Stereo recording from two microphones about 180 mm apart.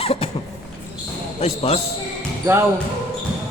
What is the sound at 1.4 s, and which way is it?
Speech, 35° left (ahead or behind).